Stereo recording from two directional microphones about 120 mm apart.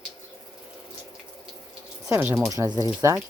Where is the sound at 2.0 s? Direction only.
20° right (ahead or behind).